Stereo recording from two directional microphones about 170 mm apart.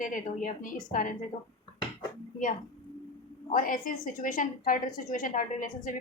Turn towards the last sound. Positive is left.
turn(degrees=50)  # may be behind; listen again after turning